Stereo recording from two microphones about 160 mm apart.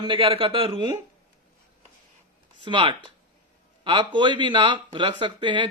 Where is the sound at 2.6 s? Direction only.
30° right (ahead or behind).